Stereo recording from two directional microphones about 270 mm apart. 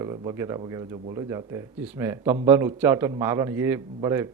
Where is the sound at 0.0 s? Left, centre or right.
Centre.